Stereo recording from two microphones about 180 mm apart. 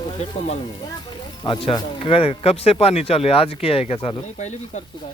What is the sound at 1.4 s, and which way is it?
Speech, 25° left (ahead or behind).